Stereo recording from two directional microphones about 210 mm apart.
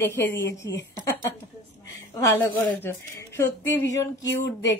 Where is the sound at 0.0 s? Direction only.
10° left (ahead or behind).